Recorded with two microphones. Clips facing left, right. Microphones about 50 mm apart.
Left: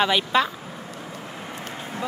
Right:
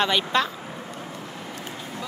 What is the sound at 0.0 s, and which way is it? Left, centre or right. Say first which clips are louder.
Speech: left 2 dB; centre.